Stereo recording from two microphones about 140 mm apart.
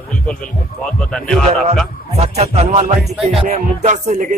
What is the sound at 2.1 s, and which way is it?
Music, 45° right (ahead or behind).